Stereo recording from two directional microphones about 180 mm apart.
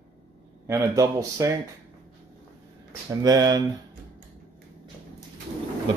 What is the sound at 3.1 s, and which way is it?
Speech, 20° right (ahead or behind).